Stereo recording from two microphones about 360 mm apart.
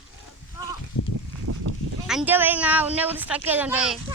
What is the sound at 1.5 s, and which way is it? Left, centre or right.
Sheep, right.